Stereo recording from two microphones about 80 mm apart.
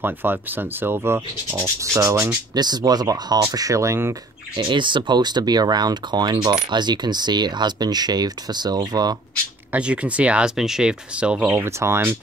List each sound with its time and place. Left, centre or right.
0.0 s speech: right
2.5 s speech: right
4.6 s speech: right
9.7 s speech: centre
11.4 s speech: right